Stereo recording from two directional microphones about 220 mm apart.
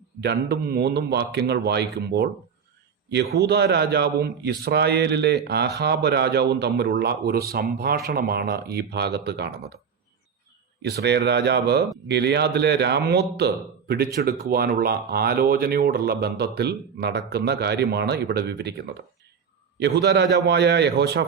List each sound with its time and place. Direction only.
0.2 s a man's voice: 50° right (ahead or behind)
10.8 s a man's voice: 50° right (ahead or behind)